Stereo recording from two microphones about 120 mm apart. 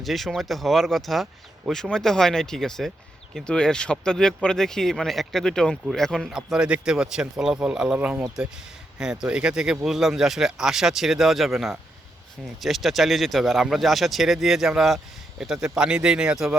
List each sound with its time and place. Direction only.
0.0 s speech: centre (ahead or behind)
7.9 s speech: 15° right (ahead or behind)